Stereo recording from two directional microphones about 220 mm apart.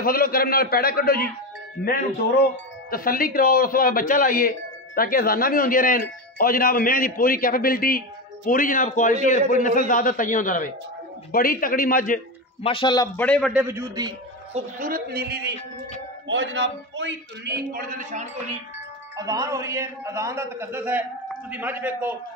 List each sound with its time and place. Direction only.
0.0 s a man's voice: 40° left (ahead or behind)
2.9 s speech: 40° left (ahead or behind)
12.6 s a man's voice: 20° left (ahead or behind); by 13.5 s 5° left (ahead or behind)
13.5 s a man's voice: 10° right (ahead or behind)
14.5 s a man's voice: 40° right (ahead or behind)
19.1 s a man's voice: 15° right (ahead or behind)